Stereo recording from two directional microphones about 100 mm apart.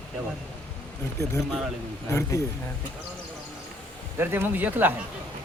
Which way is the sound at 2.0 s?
25° left (ahead or behind).